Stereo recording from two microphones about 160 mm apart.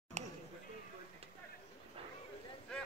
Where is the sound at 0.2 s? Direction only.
45° right (ahead or behind).